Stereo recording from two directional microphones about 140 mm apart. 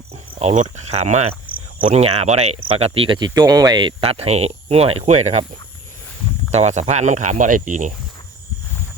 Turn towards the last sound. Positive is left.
turn(degrees=-65)  # may be behind; listen again after turning